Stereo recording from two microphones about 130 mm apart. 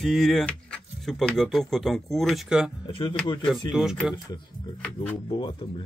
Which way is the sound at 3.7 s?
5° right (ahead or behind).